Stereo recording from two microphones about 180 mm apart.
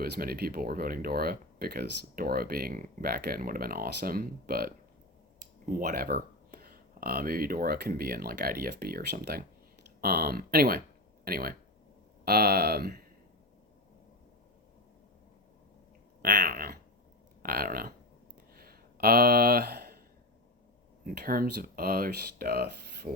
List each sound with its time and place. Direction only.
0.0 s speech: 55° right (ahead or behind)
5.7 s speech: 55° right (ahead or behind)
16.2 s speech: 60° right (ahead or behind)
18.5 s a sound: 55° right (ahead or behind)
21.0 s speech: 55° right (ahead or behind)